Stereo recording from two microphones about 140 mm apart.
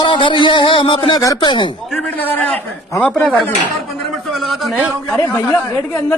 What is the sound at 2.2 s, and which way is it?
Speech, 10° left (ahead or behind).